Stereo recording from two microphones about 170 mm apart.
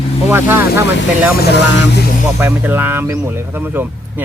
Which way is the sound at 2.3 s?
10° right (ahead or behind).